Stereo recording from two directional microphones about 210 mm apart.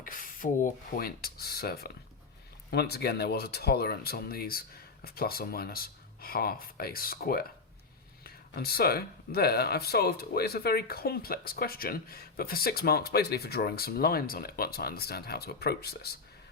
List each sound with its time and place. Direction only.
0.0 s speech: 40° left (ahead or behind)